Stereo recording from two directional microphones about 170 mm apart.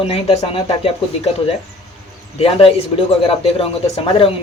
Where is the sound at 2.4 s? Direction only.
35° left (ahead or behind).